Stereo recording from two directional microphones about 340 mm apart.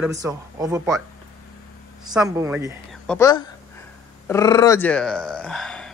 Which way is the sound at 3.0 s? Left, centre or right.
Centre.